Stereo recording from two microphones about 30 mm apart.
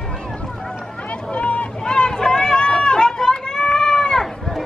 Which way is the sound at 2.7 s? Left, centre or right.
Left.